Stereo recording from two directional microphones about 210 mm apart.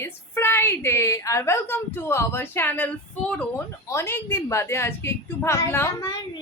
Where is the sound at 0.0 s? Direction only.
10° left (ahead or behind).